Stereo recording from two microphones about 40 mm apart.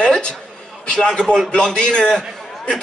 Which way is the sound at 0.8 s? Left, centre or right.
Left.